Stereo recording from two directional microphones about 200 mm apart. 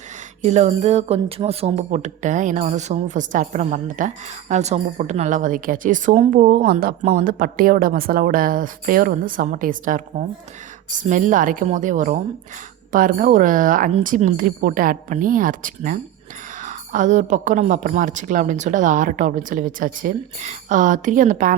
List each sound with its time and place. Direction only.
0.4 s a woman's voice: 35° right (ahead or behind)